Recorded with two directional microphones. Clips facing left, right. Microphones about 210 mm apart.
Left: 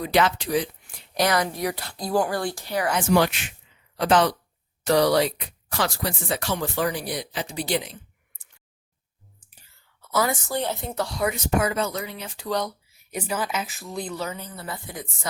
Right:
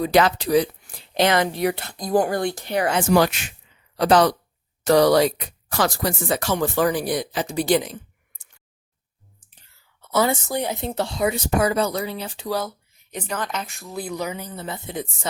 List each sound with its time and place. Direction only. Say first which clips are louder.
0.0 s speech: right 4 dB; 40° right (ahead or behind)
3.2 s speech: right 3 dB; 40° right (ahead or behind)
10.0 s a woman's voice: right 4 dB; 25° right (ahead or behind)
10.5 s speech: right 2 dB; 15° right (ahead or behind)
10.8 s speech: right 3 dB; 25° right (ahead or behind)
12.5 s speech: right 1 dB; 5° right (ahead or behind)
12.9 s speech: left 1 dB; 10° left (ahead or behind); by 15.3 s 25° right (ahead or behind)